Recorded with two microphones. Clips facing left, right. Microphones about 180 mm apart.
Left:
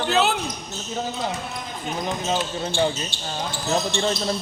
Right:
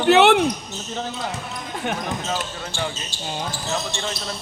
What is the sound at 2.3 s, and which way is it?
Speech, 25° left (ahead or behind).